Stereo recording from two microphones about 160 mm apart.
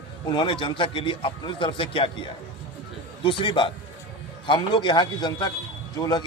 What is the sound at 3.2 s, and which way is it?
Speech, 30° left (ahead or behind).